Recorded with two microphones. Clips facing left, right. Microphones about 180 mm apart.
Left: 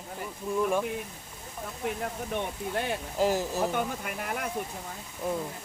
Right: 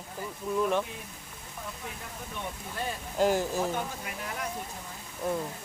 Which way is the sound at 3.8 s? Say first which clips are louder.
Left 4 dB; 55° left (ahead or behind).